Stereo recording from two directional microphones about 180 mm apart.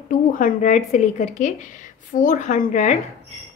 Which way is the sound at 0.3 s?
45° left (ahead or behind).